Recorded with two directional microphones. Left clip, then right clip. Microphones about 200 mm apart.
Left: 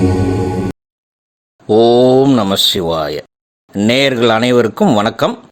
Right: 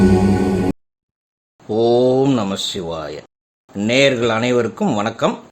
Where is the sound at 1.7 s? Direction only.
40° left (ahead or behind).